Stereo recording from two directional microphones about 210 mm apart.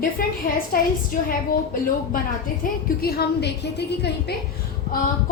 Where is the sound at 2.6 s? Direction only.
45° left (ahead or behind).